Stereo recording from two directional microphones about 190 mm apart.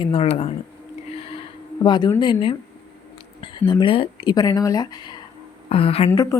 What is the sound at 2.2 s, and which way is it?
A woman's voice, 25° left (ahead or behind).